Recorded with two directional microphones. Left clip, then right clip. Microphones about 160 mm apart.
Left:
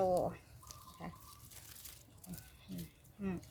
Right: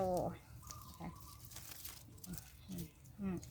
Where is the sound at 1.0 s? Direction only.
30° left (ahead or behind).